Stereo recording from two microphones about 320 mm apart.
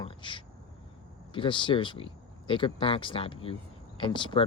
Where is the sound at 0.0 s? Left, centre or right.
Centre.